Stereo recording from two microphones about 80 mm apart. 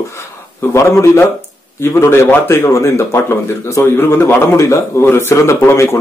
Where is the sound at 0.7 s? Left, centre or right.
Left.